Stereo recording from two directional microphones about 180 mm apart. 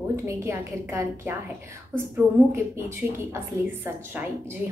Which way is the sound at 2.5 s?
15° right (ahead or behind).